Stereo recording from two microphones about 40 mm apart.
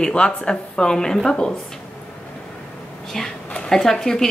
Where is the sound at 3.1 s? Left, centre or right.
Centre.